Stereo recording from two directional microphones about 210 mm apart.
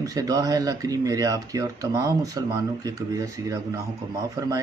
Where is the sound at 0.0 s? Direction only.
15° right (ahead or behind).